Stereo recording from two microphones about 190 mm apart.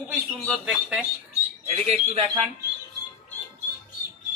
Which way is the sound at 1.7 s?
35° right (ahead or behind).